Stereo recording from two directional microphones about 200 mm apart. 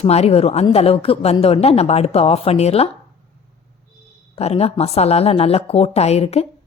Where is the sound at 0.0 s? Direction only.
30° left (ahead or behind).